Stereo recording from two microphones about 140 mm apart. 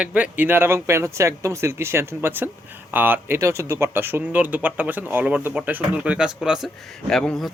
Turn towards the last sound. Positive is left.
turn(degrees=5)  # may be behind; listen again after turning